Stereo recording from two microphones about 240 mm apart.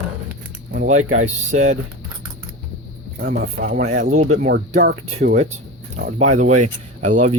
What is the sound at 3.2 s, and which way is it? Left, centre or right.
Speech, right.